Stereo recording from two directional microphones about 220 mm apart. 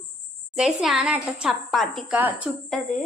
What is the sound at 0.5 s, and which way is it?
A woman's voice, 5° right (ahead or behind).